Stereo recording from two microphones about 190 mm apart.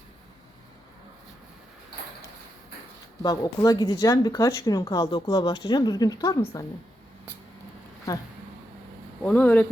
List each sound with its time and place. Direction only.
3.2 s speech: 20° left (ahead or behind)
9.2 s speech: 10° left (ahead or behind)